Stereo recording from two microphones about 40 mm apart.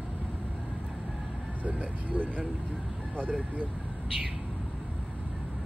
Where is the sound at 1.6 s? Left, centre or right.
Right.